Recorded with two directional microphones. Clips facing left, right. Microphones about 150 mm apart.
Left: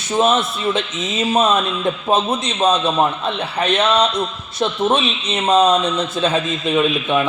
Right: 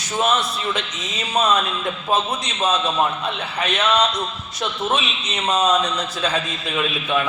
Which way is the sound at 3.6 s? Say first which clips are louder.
Left 3 dB; 30° left (ahead or behind).